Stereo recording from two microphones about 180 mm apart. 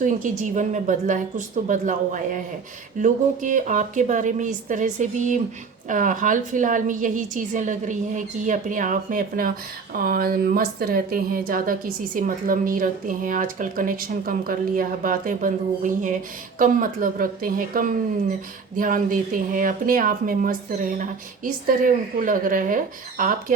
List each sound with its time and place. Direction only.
0.0 s speech: 45° right (ahead or behind)